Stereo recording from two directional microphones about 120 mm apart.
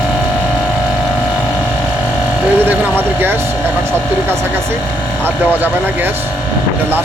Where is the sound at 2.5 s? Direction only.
15° right (ahead or behind).